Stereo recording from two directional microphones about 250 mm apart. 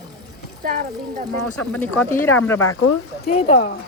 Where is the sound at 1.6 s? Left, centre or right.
Centre.